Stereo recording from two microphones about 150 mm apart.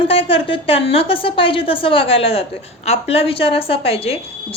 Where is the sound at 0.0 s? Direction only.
40° left (ahead or behind).